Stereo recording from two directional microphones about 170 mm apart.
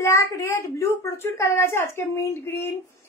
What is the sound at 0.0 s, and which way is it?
A woman's voice, 15° left (ahead or behind).